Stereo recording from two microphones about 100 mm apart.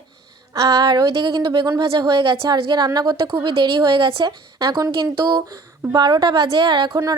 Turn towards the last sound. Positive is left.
turn(degrees=-45)  # may be behind; listen again after turning